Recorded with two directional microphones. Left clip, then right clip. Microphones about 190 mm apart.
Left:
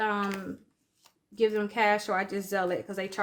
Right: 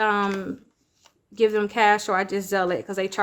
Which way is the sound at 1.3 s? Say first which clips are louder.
Right 6 dB; 40° right (ahead or behind).